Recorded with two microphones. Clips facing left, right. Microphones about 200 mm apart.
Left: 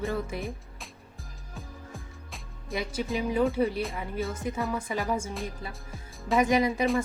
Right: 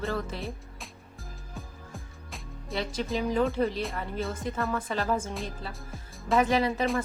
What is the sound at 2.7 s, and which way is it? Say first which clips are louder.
A woman's voice: even; 5° left (ahead or behind).